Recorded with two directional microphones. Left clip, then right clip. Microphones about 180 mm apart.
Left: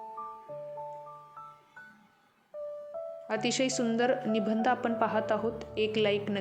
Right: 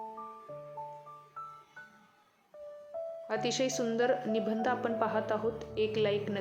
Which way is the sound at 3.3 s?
25° left (ahead or behind).